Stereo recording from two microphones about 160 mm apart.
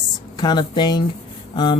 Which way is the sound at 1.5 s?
30° left (ahead or behind).